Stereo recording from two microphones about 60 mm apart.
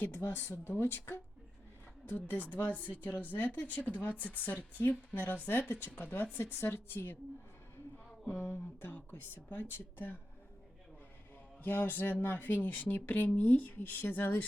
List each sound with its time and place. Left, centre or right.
0.0 s speech: left
2.0 s speech: left
8.3 s speech: left
11.6 s speech: left